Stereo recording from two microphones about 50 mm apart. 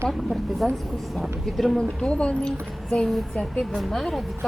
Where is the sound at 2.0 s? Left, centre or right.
Left.